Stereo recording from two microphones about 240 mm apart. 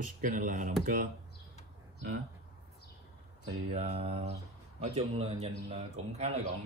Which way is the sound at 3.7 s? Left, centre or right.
Right.